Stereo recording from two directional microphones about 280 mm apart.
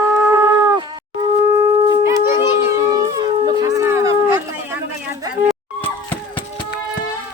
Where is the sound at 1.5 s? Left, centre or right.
Centre.